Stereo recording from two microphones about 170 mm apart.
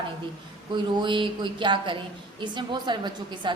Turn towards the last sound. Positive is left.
turn(degrees=-25)  # may be behind; listen again after turning